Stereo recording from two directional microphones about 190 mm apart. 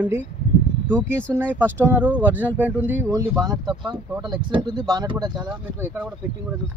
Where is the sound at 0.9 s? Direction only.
10° right (ahead or behind).